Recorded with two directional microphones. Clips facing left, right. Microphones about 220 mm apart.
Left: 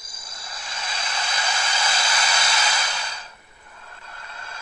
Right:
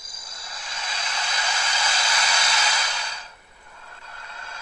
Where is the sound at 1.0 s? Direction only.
50° left (ahead or behind).